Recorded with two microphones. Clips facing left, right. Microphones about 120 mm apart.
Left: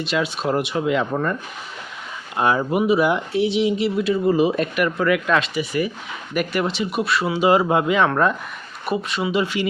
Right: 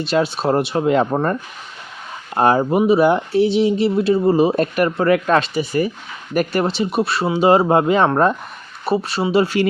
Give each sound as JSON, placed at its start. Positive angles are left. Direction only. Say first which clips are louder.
{"t": 0.0, "sound": "speech", "louder": "right 4 dB", "side_deg": -35}